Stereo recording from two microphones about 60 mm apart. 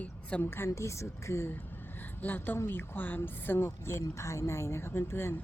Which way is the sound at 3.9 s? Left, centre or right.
Left.